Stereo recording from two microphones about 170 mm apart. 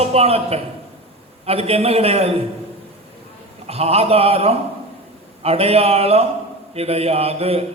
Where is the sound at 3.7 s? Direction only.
35° right (ahead or behind).